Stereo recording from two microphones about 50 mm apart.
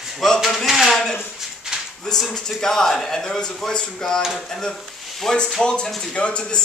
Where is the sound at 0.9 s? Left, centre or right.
Centre.